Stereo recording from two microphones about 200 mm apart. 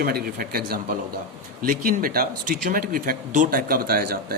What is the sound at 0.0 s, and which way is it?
Speech, 50° right (ahead or behind).